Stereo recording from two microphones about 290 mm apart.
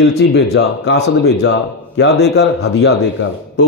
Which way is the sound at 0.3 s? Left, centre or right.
Left.